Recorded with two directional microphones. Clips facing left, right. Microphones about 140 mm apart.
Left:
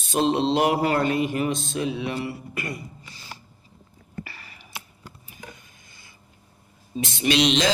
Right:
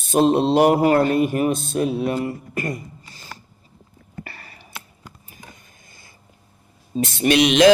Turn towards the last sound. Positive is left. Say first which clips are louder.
# right 6 dB
turn(degrees=-60)  # may be behind; listen again after turning